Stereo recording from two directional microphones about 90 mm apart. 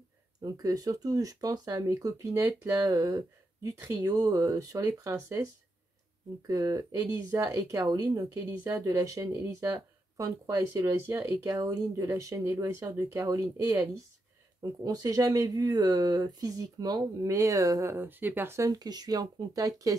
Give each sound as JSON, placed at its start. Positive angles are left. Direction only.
{"t": 0.4, "sound": "speech", "side_deg": -45}
{"t": 17.9, "sound": "speech", "side_deg": -25}
{"t": 18.6, "sound": "speech", "side_deg": -45}